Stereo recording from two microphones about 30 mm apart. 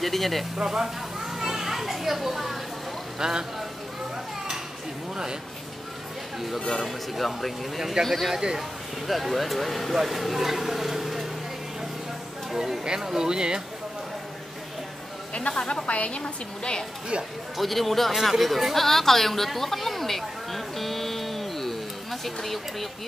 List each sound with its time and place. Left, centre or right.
0.0 s speech: centre
0.7 s children playing: centre
3.2 s speech: right
6.7 s speech: centre
8.3 s speech: centre
9.0 s speech: centre
12.5 s a sound: centre
12.8 s speech: right
15.3 s speech: left
15.9 s a woman's voice: left
16.2 s a woman's voice: left
17.6 s speech: centre
18.4 s a sound: centre